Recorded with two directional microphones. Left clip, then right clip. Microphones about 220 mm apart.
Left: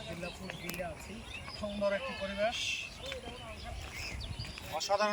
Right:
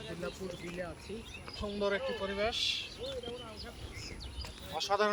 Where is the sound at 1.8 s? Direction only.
20° right (ahead or behind).